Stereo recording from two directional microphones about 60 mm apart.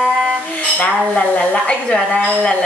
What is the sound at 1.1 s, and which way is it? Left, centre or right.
A woman's voice, centre.